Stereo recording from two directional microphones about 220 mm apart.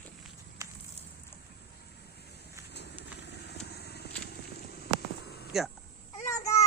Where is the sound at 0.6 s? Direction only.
15° right (ahead or behind).